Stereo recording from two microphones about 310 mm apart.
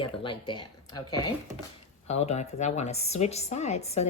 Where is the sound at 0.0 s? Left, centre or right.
Centre.